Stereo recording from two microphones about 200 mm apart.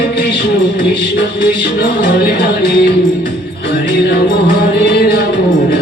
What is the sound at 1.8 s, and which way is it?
Music, 55° left (ahead or behind).